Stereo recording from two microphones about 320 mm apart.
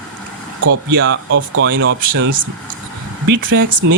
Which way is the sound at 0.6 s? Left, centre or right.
Right.